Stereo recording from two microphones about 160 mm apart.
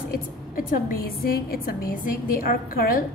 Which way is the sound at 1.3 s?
70° left (ahead or behind).